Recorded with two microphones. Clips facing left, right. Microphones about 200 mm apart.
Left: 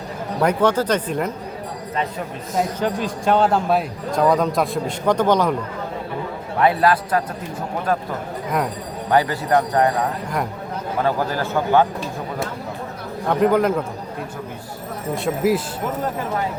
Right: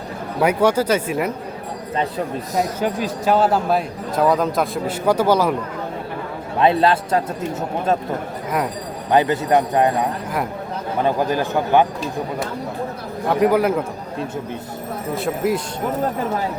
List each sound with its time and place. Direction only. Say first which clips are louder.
0.4 s a man's voice: right 1 dB; 10° right (ahead or behind)
2.0 s speech: right 4 dB; 35° right (ahead or behind)
2.8 s a man's voice: right 1 dB; 5° right (ahead or behind)
6.6 s a man's voice: right 1 dB; 25° right (ahead or behind)
9.0 s a man's voice: right 2 dB; 20° right (ahead or behind)
13.3 s a man's voice: right 1 dB; 5° right (ahead or behind)
15.1 s a man's voice: left 2 dB; centre (ahead or behind)